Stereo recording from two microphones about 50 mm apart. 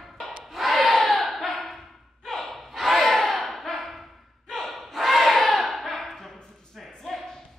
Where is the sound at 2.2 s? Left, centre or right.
Centre.